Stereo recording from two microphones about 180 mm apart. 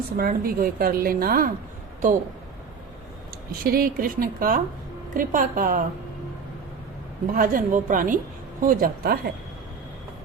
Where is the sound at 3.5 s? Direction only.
55° right (ahead or behind).